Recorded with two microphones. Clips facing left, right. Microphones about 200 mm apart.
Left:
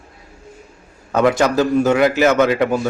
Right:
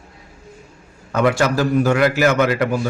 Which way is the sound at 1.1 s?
20° left (ahead or behind).